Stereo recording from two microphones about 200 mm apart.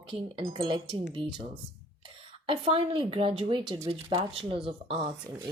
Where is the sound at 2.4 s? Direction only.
30° right (ahead or behind).